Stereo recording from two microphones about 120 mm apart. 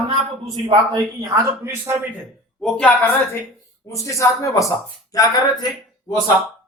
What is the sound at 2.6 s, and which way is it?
Speech, 5° left (ahead or behind).